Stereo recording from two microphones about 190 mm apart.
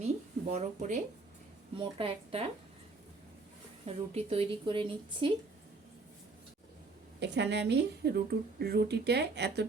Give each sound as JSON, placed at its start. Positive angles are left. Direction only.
{"t": 0.5, "sound": "speech", "side_deg": -40}
{"t": 1.7, "sound": "speech", "side_deg": -25}
{"t": 3.8, "sound": "speech", "side_deg": -30}
{"t": 7.2, "sound": "a woman's voice", "side_deg": -65}